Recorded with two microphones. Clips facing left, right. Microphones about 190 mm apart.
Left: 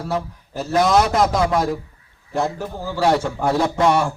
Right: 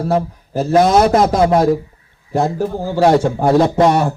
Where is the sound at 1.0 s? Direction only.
30° right (ahead or behind).